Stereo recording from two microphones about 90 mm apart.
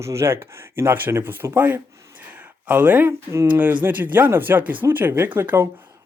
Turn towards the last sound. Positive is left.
turn(degrees=-25)  # may be behind; listen again after turning